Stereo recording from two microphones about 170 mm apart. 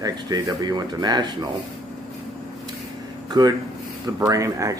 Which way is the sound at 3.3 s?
25° right (ahead or behind).